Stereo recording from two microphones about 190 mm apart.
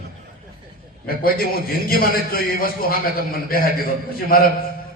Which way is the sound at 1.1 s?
50° left (ahead or behind).